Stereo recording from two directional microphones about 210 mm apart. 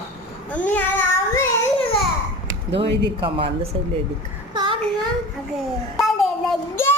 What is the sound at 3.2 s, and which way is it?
Speech, 25° right (ahead or behind).